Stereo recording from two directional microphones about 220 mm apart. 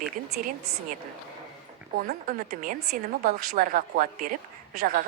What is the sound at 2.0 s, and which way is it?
A woman's voice, 35° right (ahead or behind).